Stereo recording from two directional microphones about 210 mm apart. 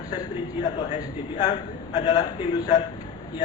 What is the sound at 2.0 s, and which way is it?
Speech, 20° left (ahead or behind).